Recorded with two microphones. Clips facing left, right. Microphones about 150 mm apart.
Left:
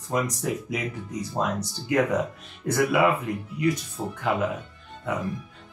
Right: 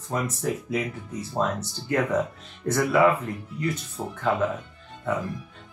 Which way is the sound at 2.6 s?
15° left (ahead or behind).